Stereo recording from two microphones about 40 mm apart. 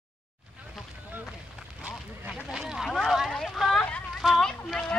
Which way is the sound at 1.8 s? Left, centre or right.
Right.